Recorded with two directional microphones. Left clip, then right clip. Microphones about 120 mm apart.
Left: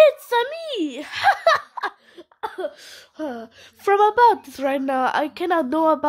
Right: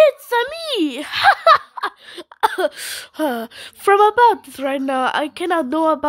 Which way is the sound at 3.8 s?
25° right (ahead or behind).